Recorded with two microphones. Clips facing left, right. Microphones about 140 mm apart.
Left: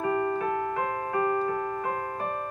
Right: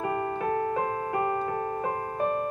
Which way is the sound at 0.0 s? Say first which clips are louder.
Left 2 dB; 25° right (ahead or behind).